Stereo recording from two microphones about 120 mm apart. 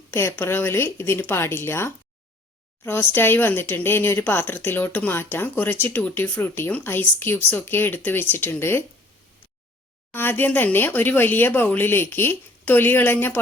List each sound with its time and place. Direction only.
0.1 s speech: 20° left (ahead or behind)
10.1 s speech: 15° left (ahead or behind)